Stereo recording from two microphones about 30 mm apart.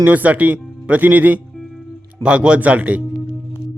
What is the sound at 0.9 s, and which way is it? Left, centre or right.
Speech, right.